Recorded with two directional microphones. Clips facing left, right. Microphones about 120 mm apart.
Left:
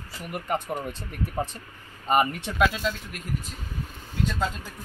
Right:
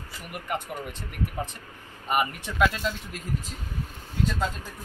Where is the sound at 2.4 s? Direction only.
15° left (ahead or behind).